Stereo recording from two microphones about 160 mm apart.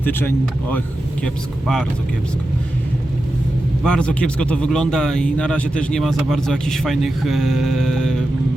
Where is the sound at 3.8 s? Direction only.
5° left (ahead or behind).